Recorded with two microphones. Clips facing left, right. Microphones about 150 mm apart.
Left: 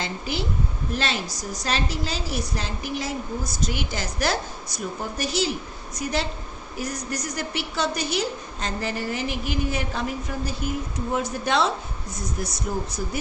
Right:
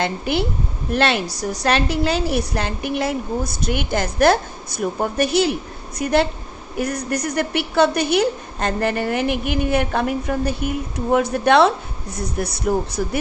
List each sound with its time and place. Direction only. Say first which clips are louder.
0.0 s a woman's voice: right 8 dB; 60° right (ahead or behind)